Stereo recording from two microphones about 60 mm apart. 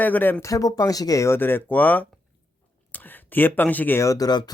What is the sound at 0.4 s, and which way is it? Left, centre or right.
Speech, left.